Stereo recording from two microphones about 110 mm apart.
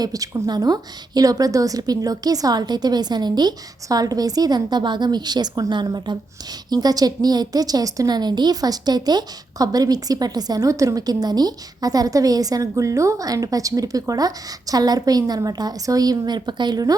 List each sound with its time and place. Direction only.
0.0 s a woman's voice: 35° right (ahead or behind)